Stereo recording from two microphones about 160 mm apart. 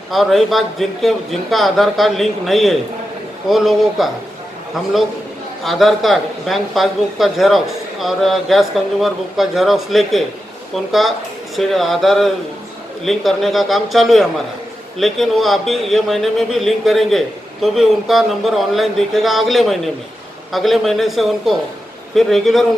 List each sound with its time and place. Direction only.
0.1 s a man's voice: centre (ahead or behind)
5.6 s a man's voice: centre (ahead or behind)